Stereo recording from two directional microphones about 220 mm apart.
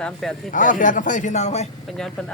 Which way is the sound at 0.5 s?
35° left (ahead or behind).